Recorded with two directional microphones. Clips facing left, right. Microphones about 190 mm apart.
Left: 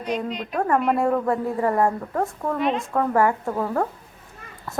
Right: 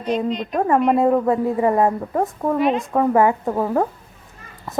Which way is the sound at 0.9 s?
20° right (ahead or behind).